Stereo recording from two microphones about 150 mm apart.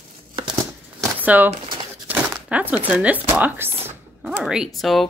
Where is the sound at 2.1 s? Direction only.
10° right (ahead or behind).